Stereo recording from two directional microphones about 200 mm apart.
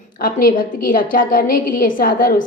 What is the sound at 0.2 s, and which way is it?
A woman's voice, 45° left (ahead or behind).